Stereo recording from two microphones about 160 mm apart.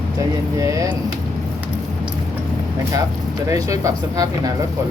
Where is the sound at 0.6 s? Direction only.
20° right (ahead or behind).